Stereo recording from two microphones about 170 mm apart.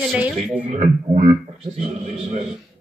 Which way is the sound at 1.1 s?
40° right (ahead or behind).